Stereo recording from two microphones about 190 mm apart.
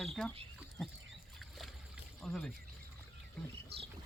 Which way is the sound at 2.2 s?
5° left (ahead or behind).